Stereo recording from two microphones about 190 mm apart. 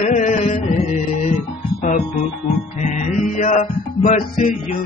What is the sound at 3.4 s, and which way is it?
Music, 40° left (ahead or behind).